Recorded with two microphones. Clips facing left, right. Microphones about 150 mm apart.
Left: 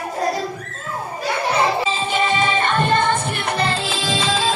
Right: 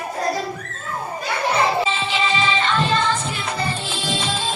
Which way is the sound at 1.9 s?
45° left (ahead or behind).